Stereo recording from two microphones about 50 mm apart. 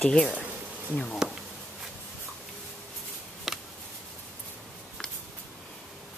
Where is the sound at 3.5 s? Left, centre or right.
Centre.